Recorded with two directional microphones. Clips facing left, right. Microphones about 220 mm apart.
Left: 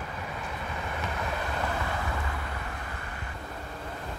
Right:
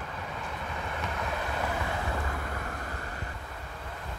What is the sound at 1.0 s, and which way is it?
Vehicle, centre (ahead or behind).